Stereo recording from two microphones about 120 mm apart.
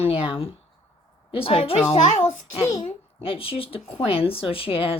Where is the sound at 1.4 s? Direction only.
50° left (ahead or behind).